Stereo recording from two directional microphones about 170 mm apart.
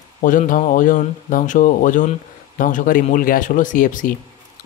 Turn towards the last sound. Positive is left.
turn(degrees=50)  # may be behind; listen again after turning